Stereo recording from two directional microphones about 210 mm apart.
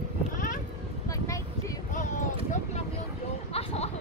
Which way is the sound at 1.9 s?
35° left (ahead or behind).